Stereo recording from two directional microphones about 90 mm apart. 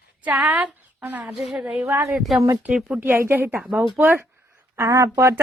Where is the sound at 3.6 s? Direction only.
10° right (ahead or behind).